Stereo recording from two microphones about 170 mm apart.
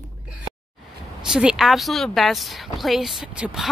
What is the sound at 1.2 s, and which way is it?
A woman's voice, 5° right (ahead or behind).